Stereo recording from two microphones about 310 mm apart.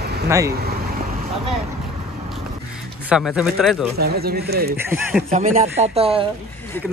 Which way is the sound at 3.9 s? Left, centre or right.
Right.